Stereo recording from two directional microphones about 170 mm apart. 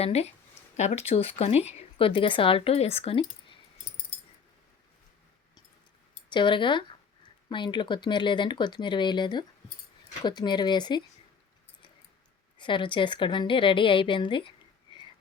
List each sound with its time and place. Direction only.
0.0 s speech: 40° left (ahead or behind)
6.3 s a woman's voice: 30° left (ahead or behind)
12.5 s a woman's voice: 30° left (ahead or behind)